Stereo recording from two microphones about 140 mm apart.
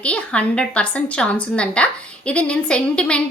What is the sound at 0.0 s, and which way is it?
A woman's voice, 10° left (ahead or behind).